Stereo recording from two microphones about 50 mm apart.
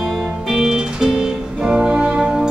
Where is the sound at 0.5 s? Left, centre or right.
Centre.